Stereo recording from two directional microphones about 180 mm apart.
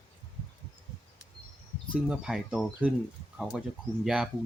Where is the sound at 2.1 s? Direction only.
5° right (ahead or behind).